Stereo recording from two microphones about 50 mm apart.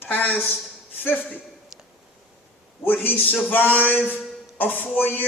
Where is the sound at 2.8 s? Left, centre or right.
Left.